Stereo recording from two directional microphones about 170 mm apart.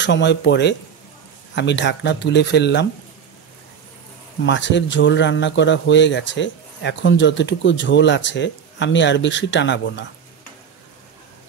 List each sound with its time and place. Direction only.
0.0 s speech: 90° left
4.5 s speech: 90° left